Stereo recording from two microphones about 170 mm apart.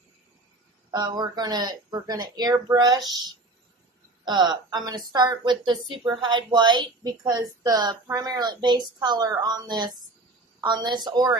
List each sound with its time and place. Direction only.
0.9 s a woman's voice: 25° right (ahead or behind)